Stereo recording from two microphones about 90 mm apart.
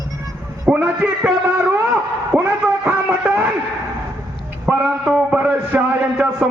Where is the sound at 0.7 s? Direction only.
15° right (ahead or behind).